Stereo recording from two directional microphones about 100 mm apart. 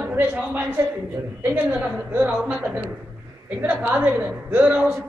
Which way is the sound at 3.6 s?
15° right (ahead or behind).